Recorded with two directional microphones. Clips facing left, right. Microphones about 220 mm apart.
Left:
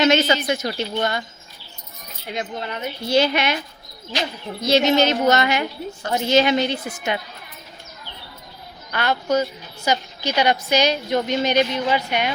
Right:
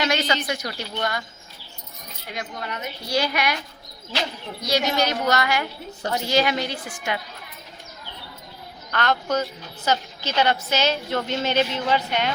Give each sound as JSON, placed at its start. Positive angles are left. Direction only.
{"t": 0.0, "sound": "speech", "side_deg": 25}
{"t": 2.3, "sound": "speech", "side_deg": 25}
{"t": 4.6, "sound": "speech", "side_deg": 25}
{"t": 8.9, "sound": "a woman's voice", "side_deg": 10}